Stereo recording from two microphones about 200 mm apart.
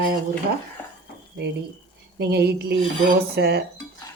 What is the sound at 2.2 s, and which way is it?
Speech, 55° right (ahead or behind).